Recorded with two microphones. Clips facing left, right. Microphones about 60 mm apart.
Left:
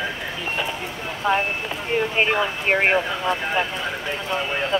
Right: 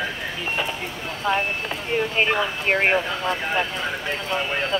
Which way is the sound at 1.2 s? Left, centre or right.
Centre.